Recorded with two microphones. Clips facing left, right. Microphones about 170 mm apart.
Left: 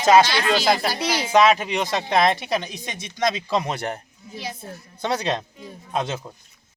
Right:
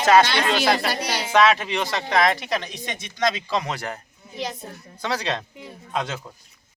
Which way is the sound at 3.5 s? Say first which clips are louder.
Left 2 dB; 25° left (ahead or behind).